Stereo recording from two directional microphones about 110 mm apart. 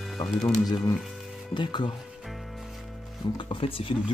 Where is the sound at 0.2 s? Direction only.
40° left (ahead or behind).